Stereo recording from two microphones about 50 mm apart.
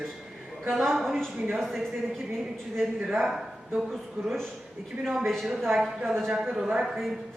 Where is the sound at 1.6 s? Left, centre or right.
Centre.